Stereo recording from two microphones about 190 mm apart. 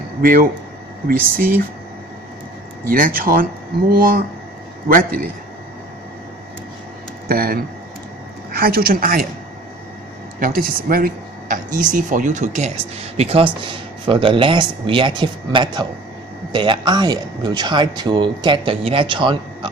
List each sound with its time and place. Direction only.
0.2 s speech: 45° right (ahead or behind)
2.8 s speech: 50° right (ahead or behind)
7.3 s speech: 50° right (ahead or behind)
10.4 s speech: 50° right (ahead or behind); by 19.7 s 25° right (ahead or behind)